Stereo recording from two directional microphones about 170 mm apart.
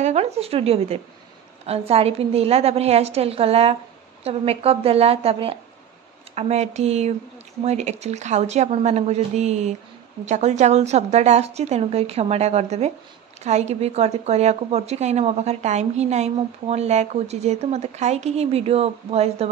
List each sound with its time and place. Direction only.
0.0 s a woman's voice: 40° right (ahead or behind)